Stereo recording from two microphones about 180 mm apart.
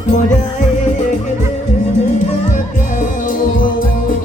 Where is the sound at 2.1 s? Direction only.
45° left (ahead or behind).